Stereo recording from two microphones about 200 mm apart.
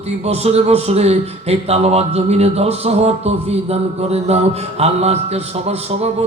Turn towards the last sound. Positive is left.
turn(degrees=-30)  # may be behind; listen again after turning